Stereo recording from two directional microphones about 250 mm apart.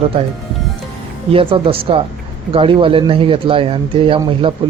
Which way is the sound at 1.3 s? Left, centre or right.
Right.